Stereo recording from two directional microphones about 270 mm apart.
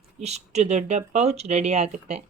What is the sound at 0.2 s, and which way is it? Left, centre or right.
Speech, right.